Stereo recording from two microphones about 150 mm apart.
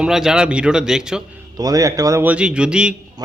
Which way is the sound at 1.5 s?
25° right (ahead or behind).